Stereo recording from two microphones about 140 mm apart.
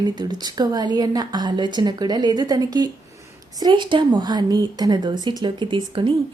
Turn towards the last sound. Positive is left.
turn(degrees=-35)  # may be behind; listen again after turning